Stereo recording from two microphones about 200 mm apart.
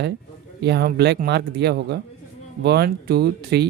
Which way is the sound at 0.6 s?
55° right (ahead or behind).